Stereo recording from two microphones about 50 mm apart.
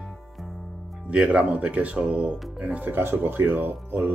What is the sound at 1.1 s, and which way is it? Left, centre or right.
Speech, right.